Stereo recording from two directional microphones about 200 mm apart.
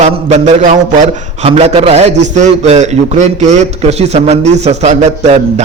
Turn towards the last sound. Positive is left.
turn(degrees=-35)  # may be behind; listen again after turning